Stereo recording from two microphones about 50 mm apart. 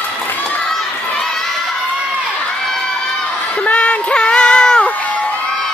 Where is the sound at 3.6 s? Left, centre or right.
Left.